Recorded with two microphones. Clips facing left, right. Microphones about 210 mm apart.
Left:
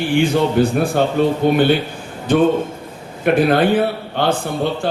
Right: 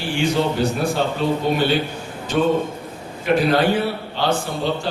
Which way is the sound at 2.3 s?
55° left (ahead or behind).